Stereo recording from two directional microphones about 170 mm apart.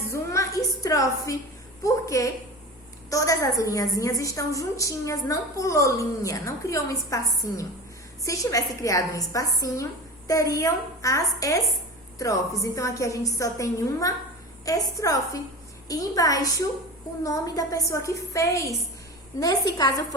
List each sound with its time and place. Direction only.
0.1 s music: 20° left (ahead or behind)
1.8 s a woman's voice: 20° left (ahead or behind)